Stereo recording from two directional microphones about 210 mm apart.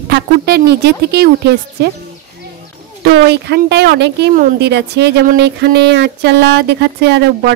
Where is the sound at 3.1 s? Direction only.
50° right (ahead or behind).